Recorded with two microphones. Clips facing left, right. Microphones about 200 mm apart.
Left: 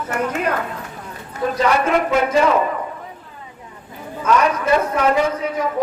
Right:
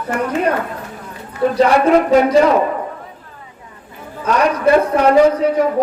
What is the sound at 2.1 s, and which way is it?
Speech, 35° right (ahead or behind).